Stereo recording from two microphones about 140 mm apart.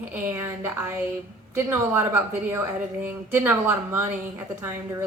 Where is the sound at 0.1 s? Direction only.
15° right (ahead or behind).